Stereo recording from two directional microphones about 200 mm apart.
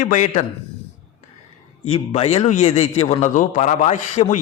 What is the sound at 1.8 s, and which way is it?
A man's voice, 30° left (ahead or behind).